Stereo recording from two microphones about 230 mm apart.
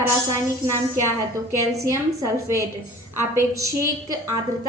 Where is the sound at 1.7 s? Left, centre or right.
Centre.